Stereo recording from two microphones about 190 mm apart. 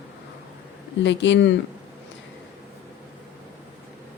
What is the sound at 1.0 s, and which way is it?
Speech, 70° left (ahead or behind).